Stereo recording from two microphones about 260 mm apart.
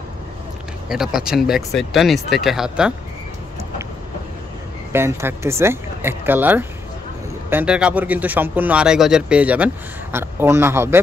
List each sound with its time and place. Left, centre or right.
0.8 s speech: centre
4.9 s speech: centre